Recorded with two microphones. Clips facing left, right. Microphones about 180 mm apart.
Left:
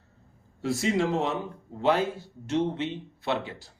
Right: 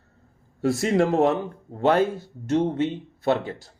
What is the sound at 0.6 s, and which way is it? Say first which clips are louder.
Speech: right 5 dB; 55° right (ahead or behind).